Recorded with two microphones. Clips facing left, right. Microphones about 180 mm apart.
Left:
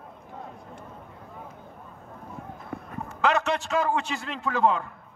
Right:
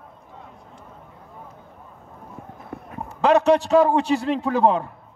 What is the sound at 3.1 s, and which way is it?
A man's voice, 35° right (ahead or behind).